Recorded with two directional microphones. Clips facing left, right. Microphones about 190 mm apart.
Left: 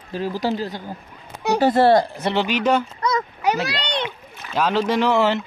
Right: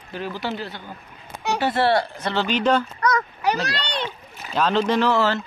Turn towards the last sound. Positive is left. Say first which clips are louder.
# left 2 dB
turn(degrees=20)  # may be behind; listen again after turning